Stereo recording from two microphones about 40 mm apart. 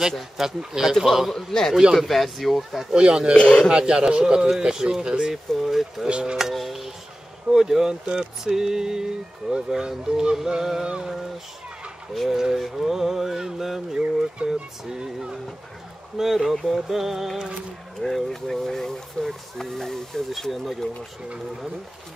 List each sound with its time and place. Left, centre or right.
0.4 s speech: centre
1.3 s speech: centre
2.9 s speech: right
3.3 s speech: left
3.6 s speech: right
5.5 s speech: centre
6.0 s speech: right
6.3 s speech: centre
7.5 s speech: centre
12.3 s speech: centre
12.5 s speech: centre
16.2 s speech: centre
18.0 s speech: centre
20.8 s speech: left